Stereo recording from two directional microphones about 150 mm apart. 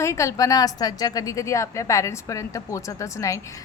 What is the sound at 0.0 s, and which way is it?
A woman's voice, 20° left (ahead or behind).